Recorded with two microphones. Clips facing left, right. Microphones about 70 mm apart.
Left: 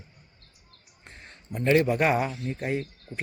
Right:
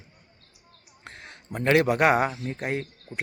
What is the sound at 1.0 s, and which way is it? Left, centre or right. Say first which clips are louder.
A man's voice: right 4 dB; right.